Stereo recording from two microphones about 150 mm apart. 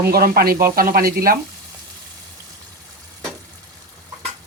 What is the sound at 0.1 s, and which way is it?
Speech, 90° right.